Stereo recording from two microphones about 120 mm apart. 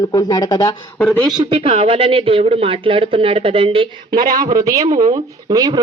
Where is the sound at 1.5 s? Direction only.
50° right (ahead or behind).